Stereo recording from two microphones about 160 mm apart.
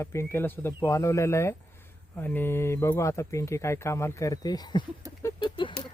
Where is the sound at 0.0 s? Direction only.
15° left (ahead or behind).